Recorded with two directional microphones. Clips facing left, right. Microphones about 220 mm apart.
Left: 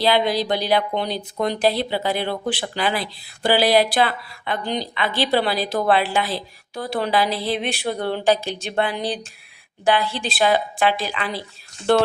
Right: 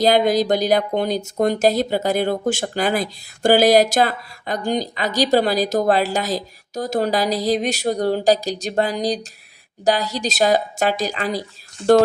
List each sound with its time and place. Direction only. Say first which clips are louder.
0.0 s a woman's voice: right 4 dB; 45° right (ahead or behind)